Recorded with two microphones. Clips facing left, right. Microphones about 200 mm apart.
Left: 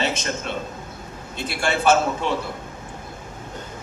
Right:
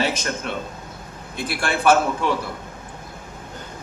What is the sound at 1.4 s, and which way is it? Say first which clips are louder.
Speech: even; 25° left (ahead or behind).